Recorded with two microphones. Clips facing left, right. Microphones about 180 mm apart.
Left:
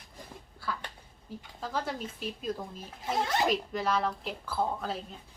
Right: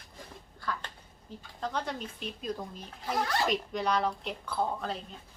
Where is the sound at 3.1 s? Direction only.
25° left (ahead or behind).